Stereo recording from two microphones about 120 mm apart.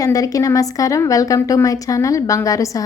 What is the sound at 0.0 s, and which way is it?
A woman's voice, 30° left (ahead or behind).